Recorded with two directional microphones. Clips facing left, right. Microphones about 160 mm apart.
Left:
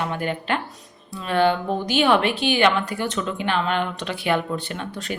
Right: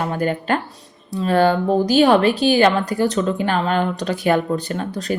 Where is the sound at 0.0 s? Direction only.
40° right (ahead or behind).